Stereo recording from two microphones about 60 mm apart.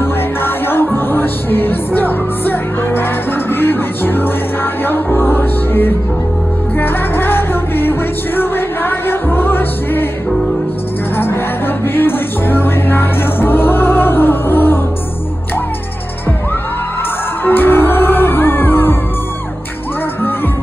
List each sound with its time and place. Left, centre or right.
0.0 s music: left
11.1 s music: left
17.5 s music: left